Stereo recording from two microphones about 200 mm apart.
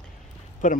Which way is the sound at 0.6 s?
40° left (ahead or behind).